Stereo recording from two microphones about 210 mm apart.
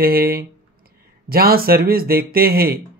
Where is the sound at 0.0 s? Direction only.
45° right (ahead or behind).